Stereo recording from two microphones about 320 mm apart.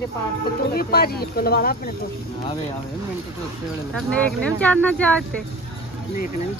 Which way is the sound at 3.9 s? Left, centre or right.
Centre.